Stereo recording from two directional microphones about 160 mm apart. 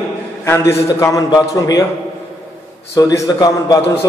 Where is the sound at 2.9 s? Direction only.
20° left (ahead or behind).